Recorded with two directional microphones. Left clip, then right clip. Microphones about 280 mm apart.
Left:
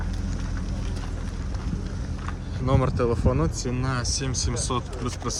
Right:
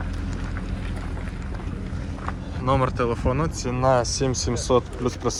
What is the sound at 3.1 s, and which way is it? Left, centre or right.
Speech, right.